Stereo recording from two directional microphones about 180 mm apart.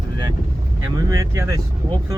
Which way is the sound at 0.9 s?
20° right (ahead or behind).